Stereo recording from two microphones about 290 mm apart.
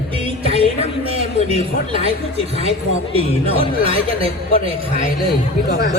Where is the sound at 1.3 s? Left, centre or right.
Left.